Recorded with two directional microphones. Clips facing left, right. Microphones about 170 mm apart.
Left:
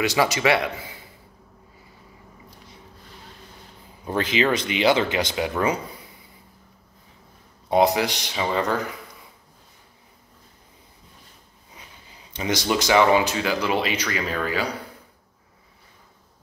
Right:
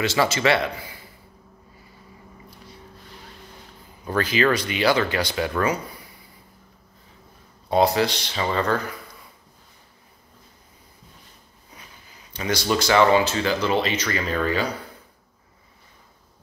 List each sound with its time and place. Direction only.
0.0 s speech: 15° left (ahead or behind)
4.0 s speech: 20° left (ahead or behind)
7.7 s speech: 15° left (ahead or behind)
12.3 s speech: 20° left (ahead or behind)